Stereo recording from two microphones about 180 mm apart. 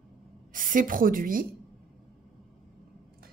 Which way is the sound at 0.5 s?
50° right (ahead or behind).